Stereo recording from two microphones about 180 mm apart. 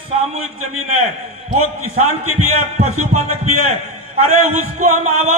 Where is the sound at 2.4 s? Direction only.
35° right (ahead or behind).